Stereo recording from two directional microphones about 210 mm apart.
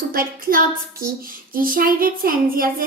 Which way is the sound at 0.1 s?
45° right (ahead or behind).